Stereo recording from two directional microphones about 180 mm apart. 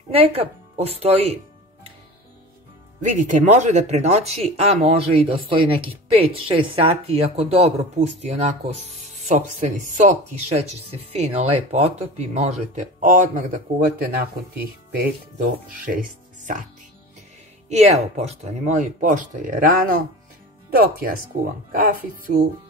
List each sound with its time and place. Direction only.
0.1 s speech: 35° right (ahead or behind)
3.0 s speech: 45° right (ahead or behind)
17.6 s speech: 40° right (ahead or behind)